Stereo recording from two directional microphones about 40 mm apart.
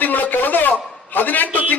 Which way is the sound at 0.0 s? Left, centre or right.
Left.